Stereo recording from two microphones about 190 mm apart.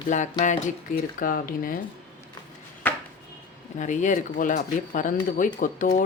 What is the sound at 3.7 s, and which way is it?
Speech, 40° left (ahead or behind).